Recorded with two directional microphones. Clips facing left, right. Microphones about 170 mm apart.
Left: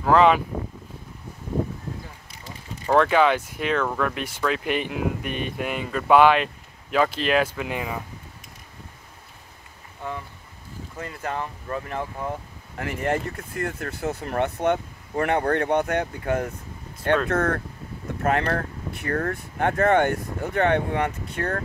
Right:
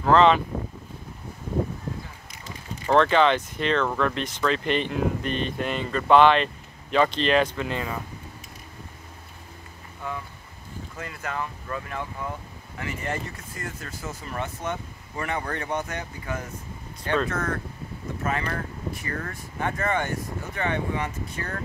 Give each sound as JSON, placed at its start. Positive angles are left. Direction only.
{"t": 0.0, "sound": "speech", "side_deg": 10}
{"t": 2.9, "sound": "speech", "side_deg": 10}
{"t": 11.0, "sound": "speech", "side_deg": 35}
{"t": 12.7, "sound": "speech", "side_deg": 55}